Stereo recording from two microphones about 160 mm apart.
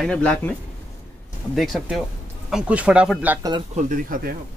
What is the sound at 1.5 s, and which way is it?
Speech, centre (ahead or behind).